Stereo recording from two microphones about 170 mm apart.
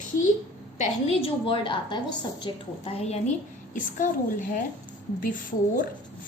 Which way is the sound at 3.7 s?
50° left (ahead or behind).